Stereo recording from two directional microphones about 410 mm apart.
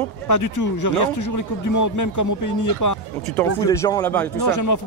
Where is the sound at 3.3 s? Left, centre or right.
Centre.